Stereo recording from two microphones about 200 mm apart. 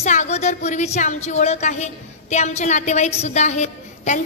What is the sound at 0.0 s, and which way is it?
Speech, 35° left (ahead or behind).